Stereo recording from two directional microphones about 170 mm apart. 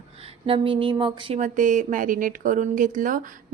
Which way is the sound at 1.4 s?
50° right (ahead or behind).